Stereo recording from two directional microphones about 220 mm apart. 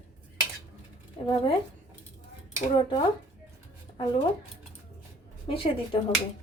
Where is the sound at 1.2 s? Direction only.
25° left (ahead or behind).